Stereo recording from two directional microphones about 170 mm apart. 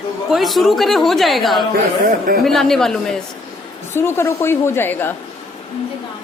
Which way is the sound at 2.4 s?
Centre (ahead or behind).